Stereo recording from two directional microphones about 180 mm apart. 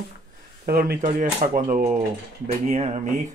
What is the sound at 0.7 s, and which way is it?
Speech, 60° right (ahead or behind).